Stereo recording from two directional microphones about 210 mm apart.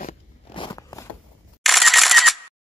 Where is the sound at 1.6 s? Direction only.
Centre (ahead or behind).